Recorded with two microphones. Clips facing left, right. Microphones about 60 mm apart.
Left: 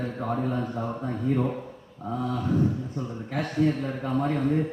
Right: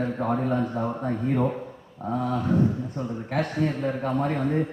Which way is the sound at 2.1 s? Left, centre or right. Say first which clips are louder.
Right 3 dB; right.